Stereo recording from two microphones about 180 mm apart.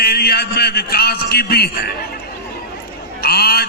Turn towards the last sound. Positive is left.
turn(degrees=60)  # may be behind; listen again after turning